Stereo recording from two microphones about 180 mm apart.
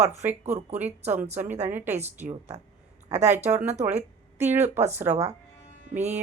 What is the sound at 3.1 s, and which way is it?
Speech, 40° right (ahead or behind).